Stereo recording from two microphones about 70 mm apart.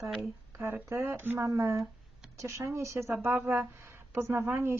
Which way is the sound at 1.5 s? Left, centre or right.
Right.